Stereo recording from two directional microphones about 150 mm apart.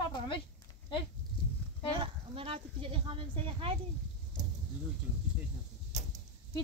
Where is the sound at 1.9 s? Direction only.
35° right (ahead or behind).